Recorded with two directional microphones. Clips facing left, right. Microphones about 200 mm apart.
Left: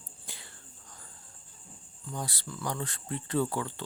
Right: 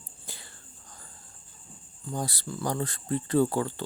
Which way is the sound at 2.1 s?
40° right (ahead or behind).